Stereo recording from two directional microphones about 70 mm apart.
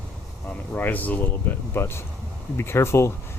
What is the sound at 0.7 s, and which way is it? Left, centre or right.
Speech, left.